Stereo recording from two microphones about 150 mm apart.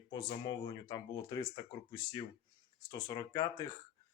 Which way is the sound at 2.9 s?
25° left (ahead or behind).